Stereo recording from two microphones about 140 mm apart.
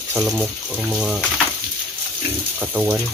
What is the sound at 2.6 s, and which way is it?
Speech, 10° right (ahead or behind).